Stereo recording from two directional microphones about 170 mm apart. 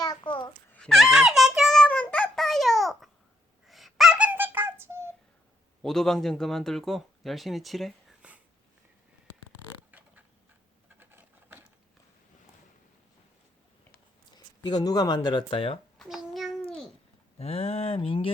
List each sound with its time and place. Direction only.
0.0 s babbling: 25° left (ahead or behind)
0.7 s a sound: 5° left (ahead or behind); by 5.1 s 15° right (ahead or behind)
5.8 s speech: 5° left (ahead or behind)
11.0 s patter: 10° right (ahead or behind)
14.3 s speech: 25° left (ahead or behind)
16.0 s child singing: centre (ahead or behind)
16.6 s babbling: 5° left (ahead or behind)
17.3 s a sound: 35° left (ahead or behind)